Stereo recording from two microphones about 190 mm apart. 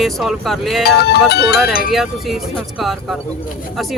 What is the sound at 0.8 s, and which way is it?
Music, 60° left (ahead or behind).